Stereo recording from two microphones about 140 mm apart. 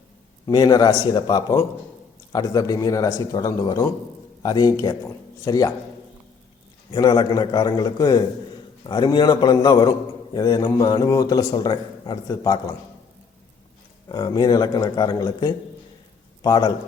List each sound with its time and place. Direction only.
0.4 s a man's voice: 30° left (ahead or behind)
6.9 s a man's voice: 30° left (ahead or behind)
14.1 s a man's voice: 30° left (ahead or behind)